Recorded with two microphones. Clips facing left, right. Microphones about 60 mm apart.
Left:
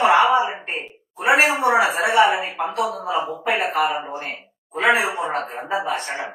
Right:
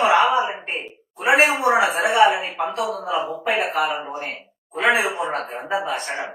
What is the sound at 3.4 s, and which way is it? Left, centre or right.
Speech, centre.